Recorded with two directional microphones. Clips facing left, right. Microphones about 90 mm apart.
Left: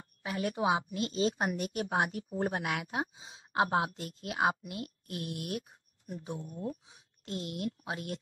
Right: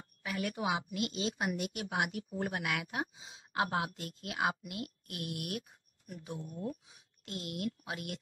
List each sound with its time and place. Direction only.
0.2 s a woman's voice: 30° left (ahead or behind)